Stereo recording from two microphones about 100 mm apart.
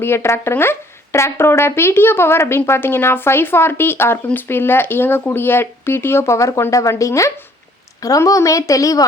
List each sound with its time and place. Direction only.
0.0 s a woman's voice: 25° left (ahead or behind)